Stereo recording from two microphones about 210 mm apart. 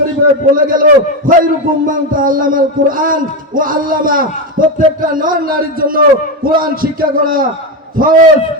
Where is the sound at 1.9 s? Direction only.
40° right (ahead or behind).